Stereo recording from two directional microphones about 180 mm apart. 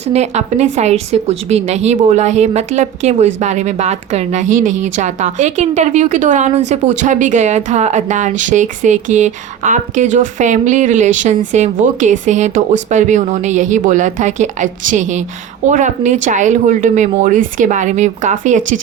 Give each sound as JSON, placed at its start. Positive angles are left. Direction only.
{"t": 0.0, "sound": "a woman's voice", "side_deg": -35}